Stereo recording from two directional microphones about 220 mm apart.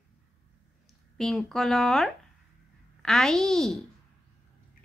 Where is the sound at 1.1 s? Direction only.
Centre (ahead or behind).